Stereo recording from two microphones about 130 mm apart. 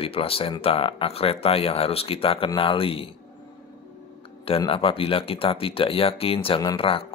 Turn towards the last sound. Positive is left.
turn(degrees=45)  # may be behind; listen again after turning